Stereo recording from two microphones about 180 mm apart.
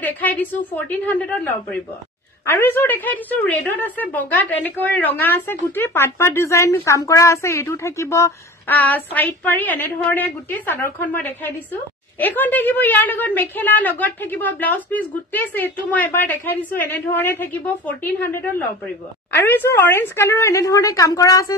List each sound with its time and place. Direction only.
0.0 s a woman's voice: 10° left (ahead or behind)